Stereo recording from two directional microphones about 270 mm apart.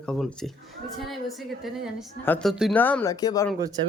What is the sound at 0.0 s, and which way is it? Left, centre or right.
A woman's voice, centre.